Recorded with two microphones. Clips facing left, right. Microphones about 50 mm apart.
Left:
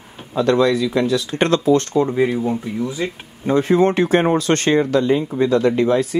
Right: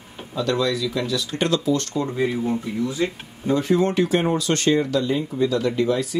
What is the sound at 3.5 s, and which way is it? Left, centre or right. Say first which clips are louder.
Speech: left 5 dB; left.